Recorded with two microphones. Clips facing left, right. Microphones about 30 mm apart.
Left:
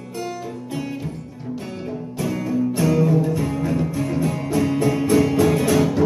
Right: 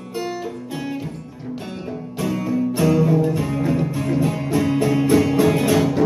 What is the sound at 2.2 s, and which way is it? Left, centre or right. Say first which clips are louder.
Music: right 1 dB; centre.